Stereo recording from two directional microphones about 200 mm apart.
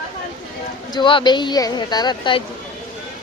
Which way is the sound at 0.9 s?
25° left (ahead or behind).